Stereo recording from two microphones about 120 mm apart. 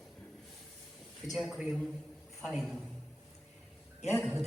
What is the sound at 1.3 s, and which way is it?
A man's voice, 5° right (ahead or behind).